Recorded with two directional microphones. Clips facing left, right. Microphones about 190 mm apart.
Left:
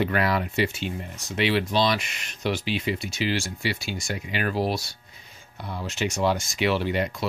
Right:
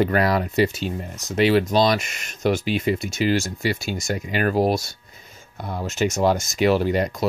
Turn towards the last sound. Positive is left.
turn(degrees=-40)  # may be behind; listen again after turning